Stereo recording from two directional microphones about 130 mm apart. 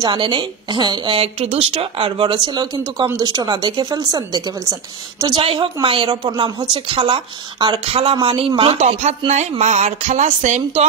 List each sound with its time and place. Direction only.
0.0 s speech: 40° right (ahead or behind)
5.2 s a woman's voice: 40° right (ahead or behind); by 10.9 s 60° right (ahead or behind)